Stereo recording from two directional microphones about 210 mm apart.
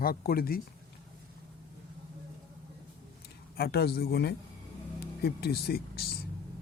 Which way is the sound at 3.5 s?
50° left (ahead or behind).